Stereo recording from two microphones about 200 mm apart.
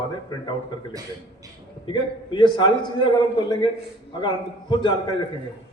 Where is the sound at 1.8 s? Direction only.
25° left (ahead or behind).